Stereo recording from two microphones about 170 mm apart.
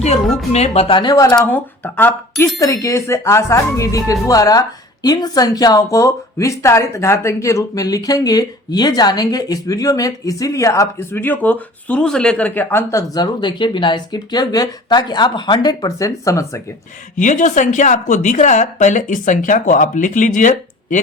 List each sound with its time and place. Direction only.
0.5 s speech: 40° left (ahead or behind); by 1.4 s 20° left (ahead or behind)
1.4 s speech: 10° left (ahead or behind)
17.2 s speech: 45° left (ahead or behind)